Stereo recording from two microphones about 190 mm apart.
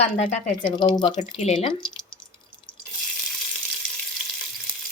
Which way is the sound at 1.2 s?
40° left (ahead or behind).